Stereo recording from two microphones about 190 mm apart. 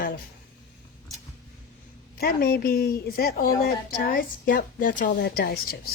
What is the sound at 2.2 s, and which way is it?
A woman's voice, 55° left (ahead or behind).